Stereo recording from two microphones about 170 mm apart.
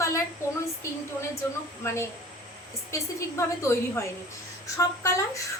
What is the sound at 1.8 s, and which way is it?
A woman's voice, 15° left (ahead or behind).